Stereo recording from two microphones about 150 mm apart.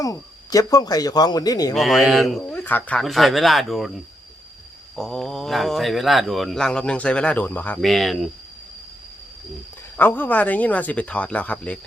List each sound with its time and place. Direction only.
0.0 s speech: 25° left (ahead or behind)
1.7 s speech: centre (ahead or behind)
2.4 s speech: 10° left (ahead or behind)
7.8 s speech: centre (ahead or behind)
10.0 s speech: 10° left (ahead or behind)